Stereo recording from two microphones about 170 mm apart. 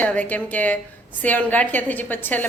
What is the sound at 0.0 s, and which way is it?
A woman's voice, 10° left (ahead or behind).